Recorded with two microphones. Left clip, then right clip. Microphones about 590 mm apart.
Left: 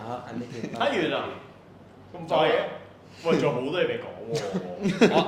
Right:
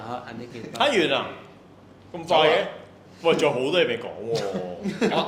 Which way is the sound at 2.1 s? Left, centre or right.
Right.